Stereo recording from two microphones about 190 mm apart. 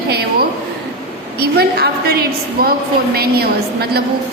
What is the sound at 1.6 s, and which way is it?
A woman's voice, 55° right (ahead or behind).